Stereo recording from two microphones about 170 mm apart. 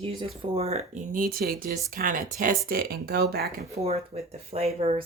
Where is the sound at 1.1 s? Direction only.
60° right (ahead or behind).